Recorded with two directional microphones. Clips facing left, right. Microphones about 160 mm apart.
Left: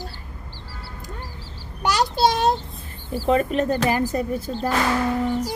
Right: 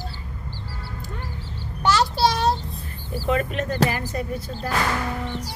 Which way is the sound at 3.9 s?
40° left (ahead or behind).